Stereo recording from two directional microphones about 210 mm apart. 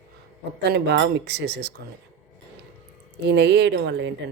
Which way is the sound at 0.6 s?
50° right (ahead or behind).